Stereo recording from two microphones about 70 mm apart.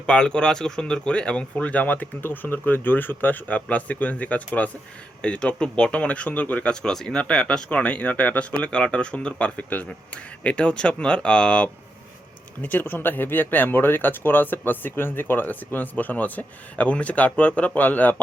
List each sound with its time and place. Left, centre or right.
0.0 s speech: centre
12.6 s speech: left